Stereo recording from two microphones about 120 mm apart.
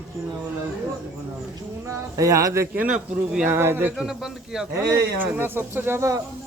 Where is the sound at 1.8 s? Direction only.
25° right (ahead or behind).